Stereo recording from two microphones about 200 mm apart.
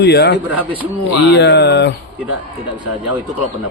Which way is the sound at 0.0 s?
55° left (ahead or behind).